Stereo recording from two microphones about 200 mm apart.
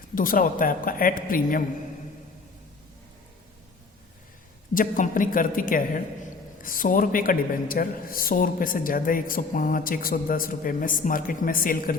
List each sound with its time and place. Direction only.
0.1 s a man's voice: 45° left (ahead or behind)
4.7 s a man's voice: 40° left (ahead or behind)